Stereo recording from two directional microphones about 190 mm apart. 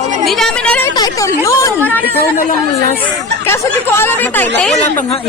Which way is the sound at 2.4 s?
45° left (ahead or behind).